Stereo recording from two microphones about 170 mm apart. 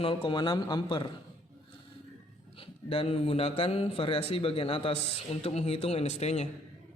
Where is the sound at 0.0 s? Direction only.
30° left (ahead or behind).